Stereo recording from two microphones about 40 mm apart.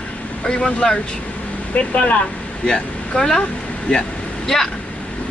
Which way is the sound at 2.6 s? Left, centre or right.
Left.